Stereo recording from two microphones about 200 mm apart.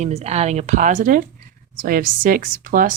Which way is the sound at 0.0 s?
35° right (ahead or behind).